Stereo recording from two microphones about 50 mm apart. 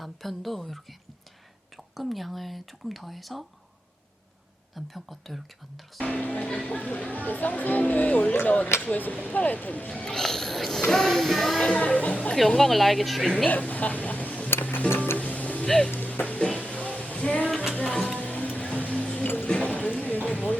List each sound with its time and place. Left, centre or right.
0.0 s speech: centre
4.7 s speech: centre
6.0 s speech: left
10.0 s speech: centre
10.8 s music: centre
11.6 s speech: left
12.5 s speech: centre
13.5 s a sound: left
14.6 s music: left
15.6 s speech: centre
15.9 s music: left
19.7 s a sound: left